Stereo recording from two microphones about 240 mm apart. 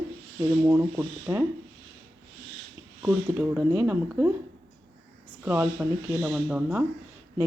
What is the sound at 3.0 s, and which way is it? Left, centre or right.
Speech, centre.